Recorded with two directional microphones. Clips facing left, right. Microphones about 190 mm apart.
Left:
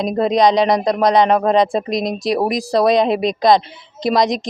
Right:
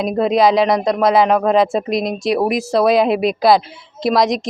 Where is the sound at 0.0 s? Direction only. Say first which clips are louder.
Even; 5° right (ahead or behind).